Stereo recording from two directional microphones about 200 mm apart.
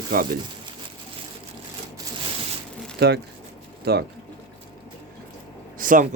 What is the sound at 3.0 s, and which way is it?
Speech, 55° right (ahead or behind).